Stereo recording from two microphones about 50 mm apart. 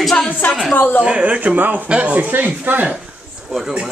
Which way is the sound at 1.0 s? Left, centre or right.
Right.